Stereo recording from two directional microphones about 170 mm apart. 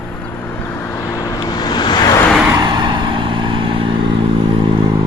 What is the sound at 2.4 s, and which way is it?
Vehicle, 20° right (ahead or behind).